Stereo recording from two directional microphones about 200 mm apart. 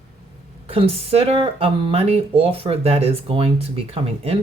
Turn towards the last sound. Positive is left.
turn(degrees=-30)  # may be behind; listen again after turning